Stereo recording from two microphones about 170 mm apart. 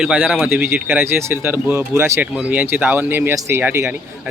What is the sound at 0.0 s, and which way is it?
Speech, 5° right (ahead or behind).